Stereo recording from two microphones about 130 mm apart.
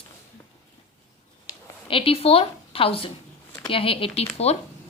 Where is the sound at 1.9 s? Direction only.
45° left (ahead or behind).